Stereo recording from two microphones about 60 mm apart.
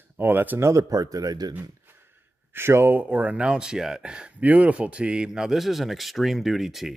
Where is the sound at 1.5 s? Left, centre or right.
Right.